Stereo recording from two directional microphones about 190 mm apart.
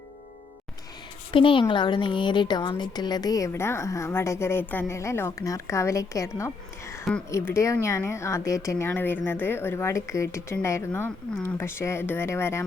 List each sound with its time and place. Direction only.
1.3 s speech: 25° left (ahead or behind)